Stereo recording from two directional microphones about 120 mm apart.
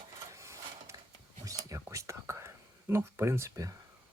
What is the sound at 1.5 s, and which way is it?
Whispering, 25° right (ahead or behind).